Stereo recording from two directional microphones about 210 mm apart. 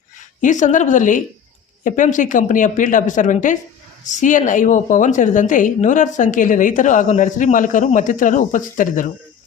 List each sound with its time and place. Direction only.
0.4 s a woman's voice: 35° left (ahead or behind)